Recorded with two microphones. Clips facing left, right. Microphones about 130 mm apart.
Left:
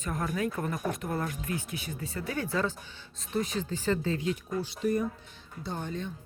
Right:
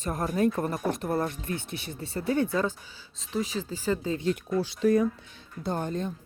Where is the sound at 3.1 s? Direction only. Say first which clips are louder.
Right 1 dB; centre (ahead or behind).